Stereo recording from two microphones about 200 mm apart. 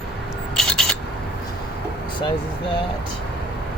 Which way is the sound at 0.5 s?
5° left (ahead or behind).